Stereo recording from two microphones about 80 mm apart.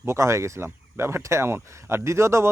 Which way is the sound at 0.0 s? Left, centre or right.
Right.